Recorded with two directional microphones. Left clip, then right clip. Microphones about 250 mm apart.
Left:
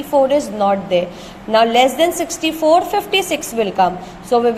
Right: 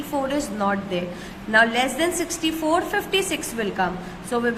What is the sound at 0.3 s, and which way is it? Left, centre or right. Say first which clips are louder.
A woman's voice: left 9 dB; centre.